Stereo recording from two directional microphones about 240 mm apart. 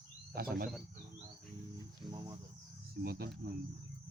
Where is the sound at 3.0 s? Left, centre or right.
Right.